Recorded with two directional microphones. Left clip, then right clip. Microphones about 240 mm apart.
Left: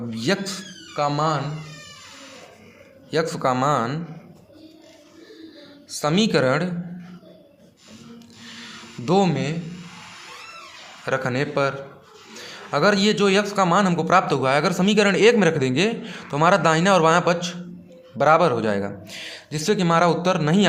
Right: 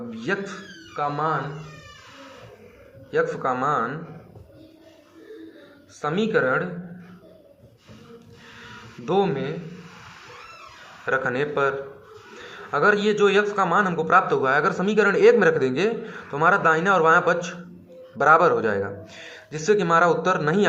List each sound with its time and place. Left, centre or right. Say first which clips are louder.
0.1 s a man's voice: left 3 dB; left
3.1 s a man's voice: left 1 dB; left
6.0 s speech: left 2 dB; left
8.6 s a sound: left 2 dB; left
11.0 s a man's voice: even; left